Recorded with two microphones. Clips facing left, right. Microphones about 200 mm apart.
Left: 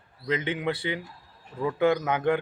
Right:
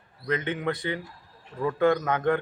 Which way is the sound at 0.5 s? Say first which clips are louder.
Even; 10° left (ahead or behind).